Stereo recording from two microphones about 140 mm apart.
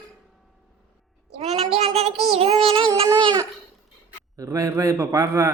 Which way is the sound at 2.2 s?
45° right (ahead or behind).